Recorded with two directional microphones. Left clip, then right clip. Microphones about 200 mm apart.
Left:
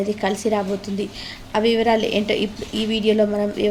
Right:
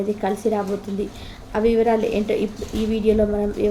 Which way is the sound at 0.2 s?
15° left (ahead or behind).